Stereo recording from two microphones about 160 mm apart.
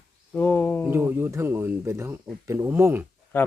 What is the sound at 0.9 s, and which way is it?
Speech, 15° right (ahead or behind).